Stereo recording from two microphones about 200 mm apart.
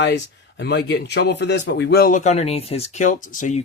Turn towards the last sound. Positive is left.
turn(degrees=40)  # may be behind; listen again after turning